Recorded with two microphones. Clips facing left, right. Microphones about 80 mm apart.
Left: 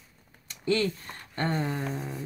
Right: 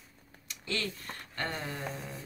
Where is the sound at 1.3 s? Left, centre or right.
Left.